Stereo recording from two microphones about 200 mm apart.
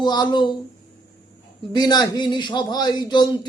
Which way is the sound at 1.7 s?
20° left (ahead or behind).